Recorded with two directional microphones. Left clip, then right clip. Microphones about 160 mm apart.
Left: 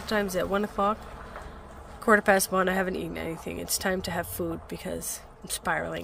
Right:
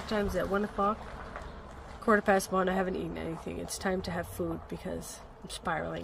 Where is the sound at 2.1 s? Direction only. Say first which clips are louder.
Left 5 dB; 10° left (ahead or behind).